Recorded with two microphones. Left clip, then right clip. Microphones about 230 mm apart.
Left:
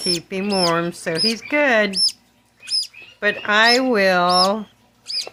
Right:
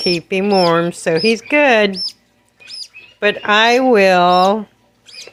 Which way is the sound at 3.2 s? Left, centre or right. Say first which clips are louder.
Right 3 dB; centre.